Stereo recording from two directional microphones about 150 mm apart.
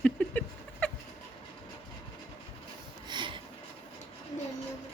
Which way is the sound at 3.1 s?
30° right (ahead or behind).